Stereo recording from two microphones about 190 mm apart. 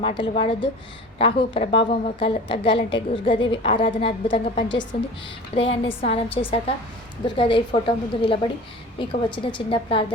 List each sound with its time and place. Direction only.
0.0 s a woman's voice: 25° left (ahead or behind)